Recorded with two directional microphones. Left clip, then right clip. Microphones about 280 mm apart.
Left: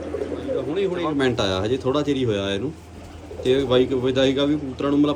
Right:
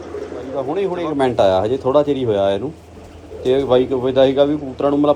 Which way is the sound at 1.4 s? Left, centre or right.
Centre.